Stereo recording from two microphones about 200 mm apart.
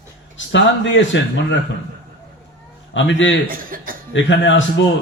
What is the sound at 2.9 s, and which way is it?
Speech, 70° left (ahead or behind).